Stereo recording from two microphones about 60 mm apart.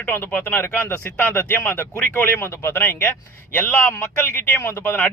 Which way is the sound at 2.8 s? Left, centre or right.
Left.